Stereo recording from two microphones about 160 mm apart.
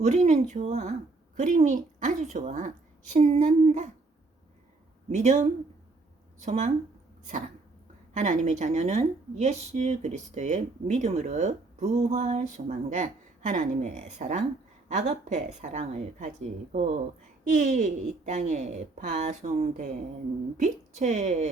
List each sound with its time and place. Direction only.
0.0 s a woman's voice: 45° right (ahead or behind)
5.0 s a woman's voice: 45° right (ahead or behind)
8.1 s a woman's voice: 50° right (ahead or behind)